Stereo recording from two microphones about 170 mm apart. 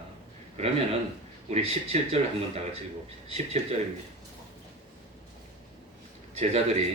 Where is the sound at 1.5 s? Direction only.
35° right (ahead or behind).